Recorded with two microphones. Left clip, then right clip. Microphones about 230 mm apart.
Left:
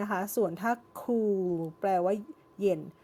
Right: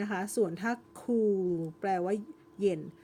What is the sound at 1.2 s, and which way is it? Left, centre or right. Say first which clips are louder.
Speech: right 1 dB; centre.